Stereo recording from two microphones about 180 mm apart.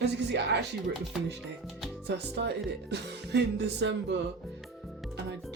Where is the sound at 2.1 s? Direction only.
70° right (ahead or behind).